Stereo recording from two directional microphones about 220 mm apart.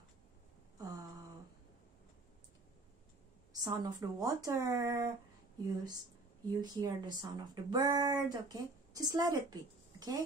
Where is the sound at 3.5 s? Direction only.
15° right (ahead or behind).